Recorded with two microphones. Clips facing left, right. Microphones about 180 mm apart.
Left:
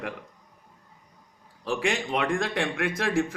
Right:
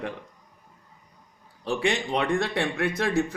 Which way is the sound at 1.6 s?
35° right (ahead or behind).